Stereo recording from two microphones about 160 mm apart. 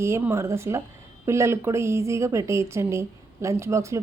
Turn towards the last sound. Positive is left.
turn(degrees=-20)  # may be behind; listen again after turning